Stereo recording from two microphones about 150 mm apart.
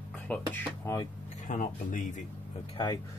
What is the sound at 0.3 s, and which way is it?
Speech, 15° left (ahead or behind).